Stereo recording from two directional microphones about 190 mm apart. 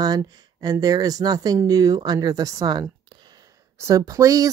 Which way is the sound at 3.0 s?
25° right (ahead or behind).